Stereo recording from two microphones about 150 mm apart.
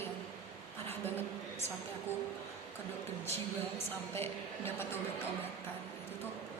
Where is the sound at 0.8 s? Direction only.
15° left (ahead or behind).